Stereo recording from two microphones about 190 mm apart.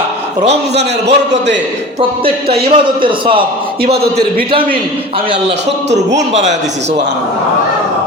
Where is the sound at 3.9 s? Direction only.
55° right (ahead or behind).